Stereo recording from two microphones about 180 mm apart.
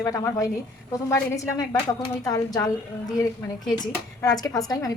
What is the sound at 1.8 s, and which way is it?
A woman's voice, 20° left (ahead or behind).